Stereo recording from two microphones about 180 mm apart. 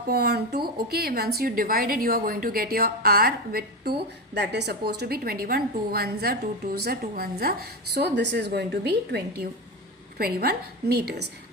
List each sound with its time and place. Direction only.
0.1 s speech: 60° right (ahead or behind)